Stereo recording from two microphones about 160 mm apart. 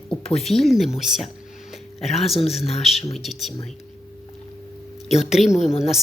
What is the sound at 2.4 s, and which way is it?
Speech, 40° left (ahead or behind).